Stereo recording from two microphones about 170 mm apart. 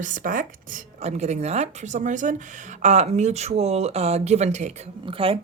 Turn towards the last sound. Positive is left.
turn(degrees=-35)  # may be behind; listen again after turning